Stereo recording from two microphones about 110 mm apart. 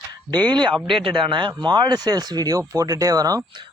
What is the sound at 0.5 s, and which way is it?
Speech, 45° right (ahead or behind).